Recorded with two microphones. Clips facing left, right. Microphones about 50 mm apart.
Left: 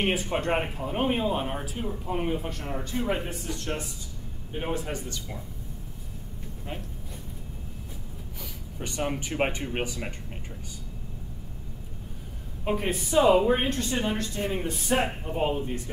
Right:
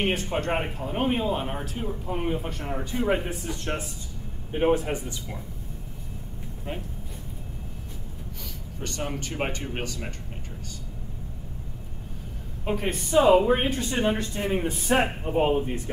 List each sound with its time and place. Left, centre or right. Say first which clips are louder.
0.0 s speech: even; centre
3.3 s a man's voice: right 2 dB; right
8.7 s speech: left 2 dB; centre
12.6 s speech: even; centre
13.9 s speech: right 3 dB; centre